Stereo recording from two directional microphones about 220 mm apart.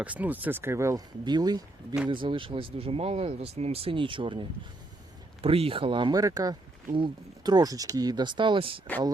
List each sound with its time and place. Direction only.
0.0 s speech: 5° right (ahead or behind); by 8.8 s 25° right (ahead or behind)